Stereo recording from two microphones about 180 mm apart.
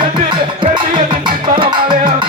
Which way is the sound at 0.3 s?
25° right (ahead or behind).